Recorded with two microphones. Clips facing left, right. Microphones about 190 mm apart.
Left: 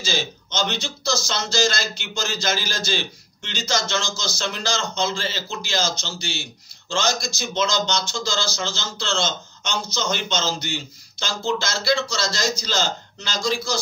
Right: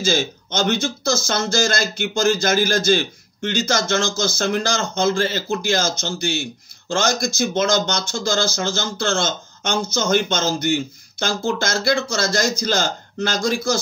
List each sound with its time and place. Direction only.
0.0 s speech: 55° right (ahead or behind)